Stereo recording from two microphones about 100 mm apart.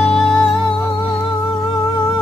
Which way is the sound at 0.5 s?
5° left (ahead or behind).